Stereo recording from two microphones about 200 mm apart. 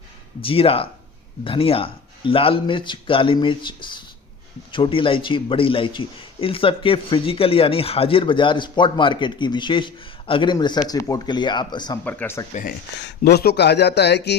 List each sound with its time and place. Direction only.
0.4 s a man's voice: 30° left (ahead or behind)
12.0 s speech: 10° left (ahead or behind)
13.1 s speech: 55° left (ahead or behind)